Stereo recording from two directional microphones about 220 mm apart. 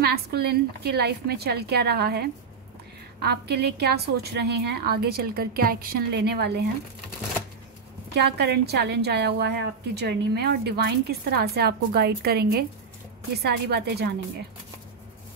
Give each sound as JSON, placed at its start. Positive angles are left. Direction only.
{"t": 0.0, "sound": "a woman's voice", "side_deg": -45}
{"t": 8.1, "sound": "a woman's voice", "side_deg": -50}